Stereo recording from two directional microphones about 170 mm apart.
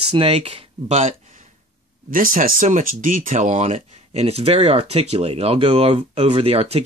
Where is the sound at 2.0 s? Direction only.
55° right (ahead or behind).